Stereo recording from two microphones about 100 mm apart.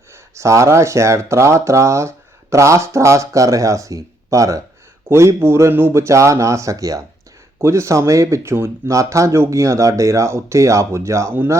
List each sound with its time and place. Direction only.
0.1 s speech: 30° right (ahead or behind)